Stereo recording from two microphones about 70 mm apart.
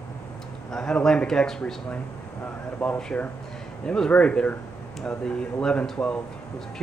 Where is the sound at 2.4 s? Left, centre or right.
Left.